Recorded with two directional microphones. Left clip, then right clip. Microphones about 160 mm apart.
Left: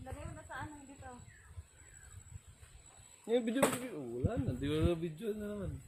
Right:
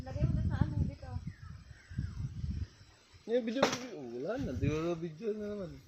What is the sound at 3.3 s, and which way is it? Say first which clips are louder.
Speech: right 1 dB; 40° left (ahead or behind).